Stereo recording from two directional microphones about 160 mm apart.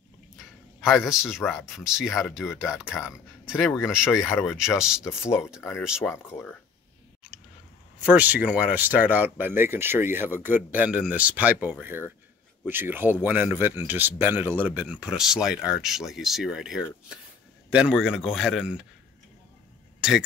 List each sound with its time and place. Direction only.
0.7 s speech: centre (ahead or behind)
5.0 s speech: 15° left (ahead or behind)
5.8 s speech: centre (ahead or behind)
8.0 s speech: 10° right (ahead or behind)
20.0 s speech: 5° right (ahead or behind)